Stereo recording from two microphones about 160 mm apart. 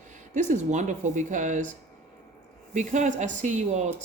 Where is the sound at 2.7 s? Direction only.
50° right (ahead or behind).